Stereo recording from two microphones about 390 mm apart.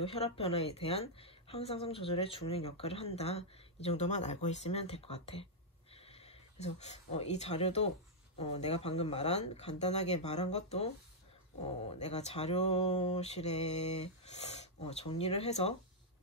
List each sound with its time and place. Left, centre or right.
0.0 s a woman's voice: centre